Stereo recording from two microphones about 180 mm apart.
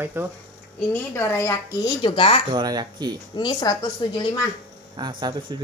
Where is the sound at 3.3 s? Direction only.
25° left (ahead or behind).